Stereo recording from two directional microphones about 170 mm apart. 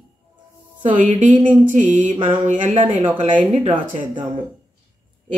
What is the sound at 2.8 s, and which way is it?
Speech, 30° right (ahead or behind).